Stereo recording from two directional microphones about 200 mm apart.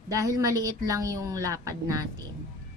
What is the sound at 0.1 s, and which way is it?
A woman's voice, 15° right (ahead or behind).